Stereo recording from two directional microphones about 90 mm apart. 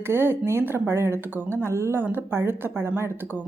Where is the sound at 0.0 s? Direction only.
25° right (ahead or behind).